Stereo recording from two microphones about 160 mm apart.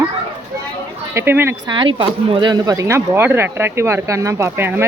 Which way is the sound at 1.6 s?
30° right (ahead or behind).